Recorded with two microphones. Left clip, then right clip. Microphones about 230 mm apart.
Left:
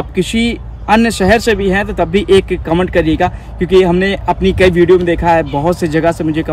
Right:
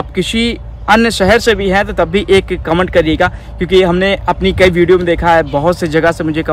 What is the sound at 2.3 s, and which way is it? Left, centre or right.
Speech, right.